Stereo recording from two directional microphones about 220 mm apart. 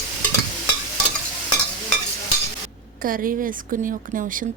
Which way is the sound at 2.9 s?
40° right (ahead or behind).